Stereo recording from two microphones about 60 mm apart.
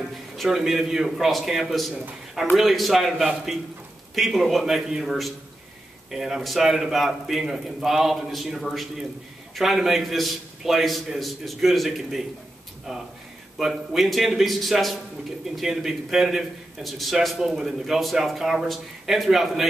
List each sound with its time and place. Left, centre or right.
0.4 s a man's voice: centre
13.6 s a man's voice: centre